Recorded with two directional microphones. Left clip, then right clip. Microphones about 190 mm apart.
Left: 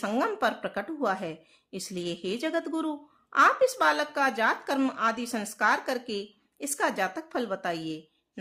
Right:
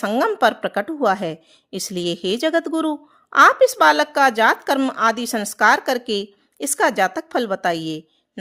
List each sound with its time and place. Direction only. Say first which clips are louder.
0.0 s a woman's voice: right 10 dB; 35° right (ahead or behind)